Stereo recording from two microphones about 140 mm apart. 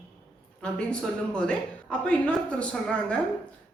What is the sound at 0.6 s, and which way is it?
A woman's voice, 5° left (ahead or behind).